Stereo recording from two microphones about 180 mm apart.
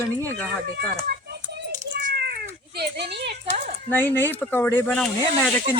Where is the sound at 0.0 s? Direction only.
15° left (ahead or behind).